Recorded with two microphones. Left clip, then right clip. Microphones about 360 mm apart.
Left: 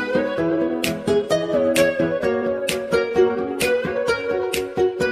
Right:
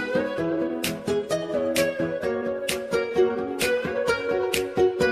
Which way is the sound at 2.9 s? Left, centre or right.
Left.